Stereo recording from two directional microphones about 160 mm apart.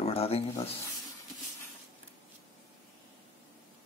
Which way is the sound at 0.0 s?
40° left (ahead or behind).